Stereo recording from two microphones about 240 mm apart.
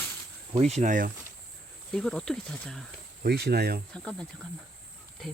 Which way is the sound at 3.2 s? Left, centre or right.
Right.